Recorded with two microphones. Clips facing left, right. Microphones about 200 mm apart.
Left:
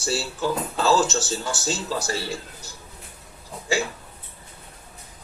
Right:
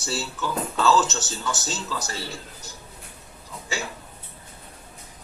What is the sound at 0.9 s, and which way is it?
Speech, 35° left (ahead or behind).